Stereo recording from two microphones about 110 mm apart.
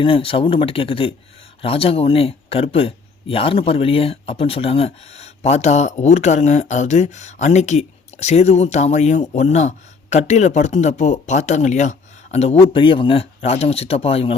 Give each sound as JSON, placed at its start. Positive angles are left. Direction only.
{"t": 0.0, "sound": "speech", "side_deg": 55}